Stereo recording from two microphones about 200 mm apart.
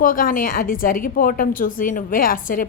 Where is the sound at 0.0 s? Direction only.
45° left (ahead or behind).